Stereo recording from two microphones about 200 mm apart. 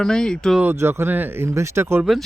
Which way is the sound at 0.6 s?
10° right (ahead or behind).